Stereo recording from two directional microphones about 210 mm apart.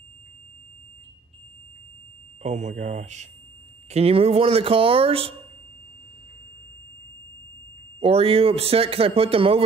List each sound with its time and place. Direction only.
2.4 s speech: 35° right (ahead or behind)
8.0 s speech: 25° right (ahead or behind)